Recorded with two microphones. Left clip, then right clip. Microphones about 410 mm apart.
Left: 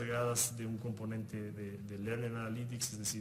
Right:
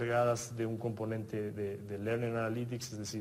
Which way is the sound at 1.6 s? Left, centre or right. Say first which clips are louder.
Right 7 dB; centre.